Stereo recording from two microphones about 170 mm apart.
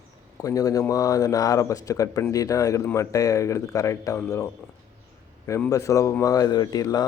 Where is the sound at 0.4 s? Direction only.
20° left (ahead or behind).